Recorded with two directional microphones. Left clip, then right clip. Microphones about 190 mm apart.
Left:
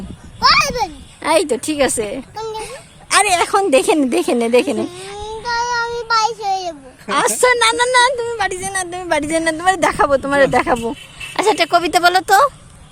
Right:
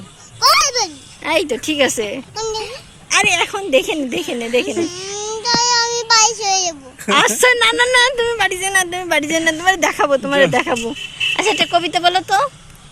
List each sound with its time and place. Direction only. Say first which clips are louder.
0.3 s a sound: even; 15° left (ahead or behind)
1.7 s a woman's voice: right 3 dB; 10° left (ahead or behind)
3.1 s speech: left 1 dB; 30° left (ahead or behind)
4.8 s speech: right 2 dB; 10° left (ahead or behind)
5.1 s child singing: right 3 dB; 10° left (ahead or behind)
7.1 s a woman's voice: right 2 dB; centre (ahead or behind)
8.4 s speech: right 4 dB; 5° left (ahead or behind); by 12.5 s 35° left (ahead or behind)